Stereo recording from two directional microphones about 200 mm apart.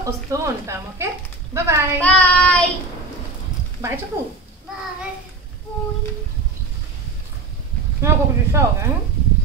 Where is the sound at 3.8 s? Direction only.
10° right (ahead or behind).